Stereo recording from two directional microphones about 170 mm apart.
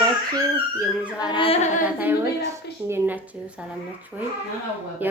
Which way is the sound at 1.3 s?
30° left (ahead or behind).